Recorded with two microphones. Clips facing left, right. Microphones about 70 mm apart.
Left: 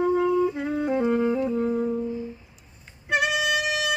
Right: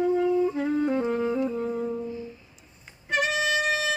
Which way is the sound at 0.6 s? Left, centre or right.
Centre.